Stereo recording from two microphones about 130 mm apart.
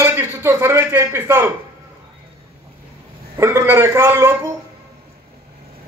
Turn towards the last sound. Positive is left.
turn(degrees=-20)  # may be behind; listen again after turning